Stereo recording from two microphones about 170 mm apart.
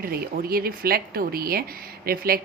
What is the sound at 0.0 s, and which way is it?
A woman's voice, 60° right (ahead or behind).